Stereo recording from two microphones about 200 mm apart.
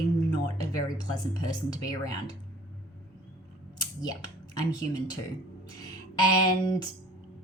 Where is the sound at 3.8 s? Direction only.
20° left (ahead or behind).